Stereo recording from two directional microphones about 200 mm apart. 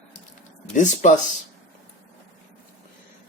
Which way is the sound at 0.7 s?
40° left (ahead or behind).